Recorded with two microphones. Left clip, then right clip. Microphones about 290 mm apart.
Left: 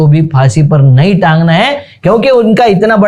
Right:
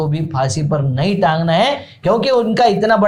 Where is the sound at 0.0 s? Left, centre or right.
Left.